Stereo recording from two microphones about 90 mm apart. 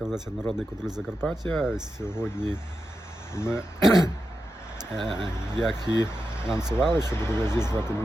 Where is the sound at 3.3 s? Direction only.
30° left (ahead or behind).